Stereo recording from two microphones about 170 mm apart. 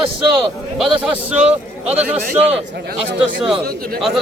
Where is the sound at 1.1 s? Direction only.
10° right (ahead or behind).